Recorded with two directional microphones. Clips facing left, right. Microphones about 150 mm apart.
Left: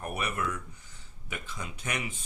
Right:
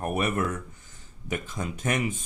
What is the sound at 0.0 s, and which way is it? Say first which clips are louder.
Speech: right 6 dB; 45° right (ahead or behind).